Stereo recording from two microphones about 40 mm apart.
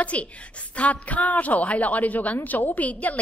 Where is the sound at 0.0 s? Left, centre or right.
Left.